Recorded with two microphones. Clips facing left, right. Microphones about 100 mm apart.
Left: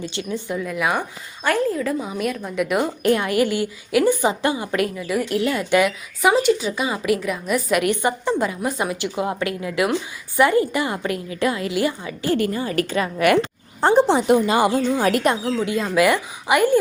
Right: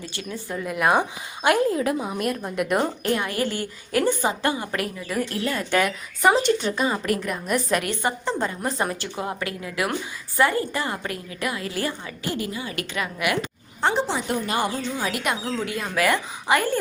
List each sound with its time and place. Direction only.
0.0 s a woman's voice: 25° left (ahead or behind)
0.6 s a woman's voice: 5° right (ahead or behind)
1.4 s a woman's voice: 15° right (ahead or behind)
2.0 s speech: centre (ahead or behind)
3.2 s a woman's voice: 15° left (ahead or behind)
7.8 s a woman's voice: 15° left (ahead or behind)
12.5 s a woman's voice: 40° left (ahead or behind)
13.8 s speech: 50° left (ahead or behind)
14.3 s a woman's voice: 90° left
14.8 s speech: 50° left (ahead or behind)
15.4 s a woman's voice: 20° left (ahead or behind)